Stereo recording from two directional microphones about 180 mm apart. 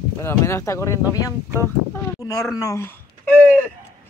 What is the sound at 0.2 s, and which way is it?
Speech, 15° left (ahead or behind).